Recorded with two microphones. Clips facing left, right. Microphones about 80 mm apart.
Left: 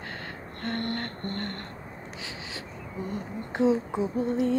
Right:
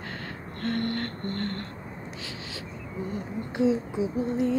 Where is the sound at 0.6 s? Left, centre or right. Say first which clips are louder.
Right 3 dB; left.